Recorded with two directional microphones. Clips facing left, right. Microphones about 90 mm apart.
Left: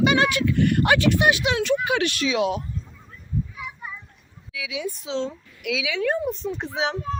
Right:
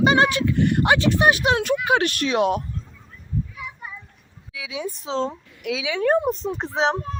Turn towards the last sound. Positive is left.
turn(degrees=-35)  # may be behind; listen again after turning